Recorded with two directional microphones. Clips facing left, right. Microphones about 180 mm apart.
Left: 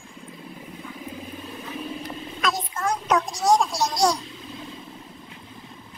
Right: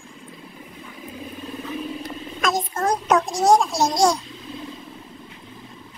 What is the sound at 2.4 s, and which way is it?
Child singing, 45° right (ahead or behind).